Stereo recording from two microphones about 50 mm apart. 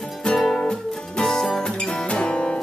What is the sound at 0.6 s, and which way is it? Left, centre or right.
Music, centre.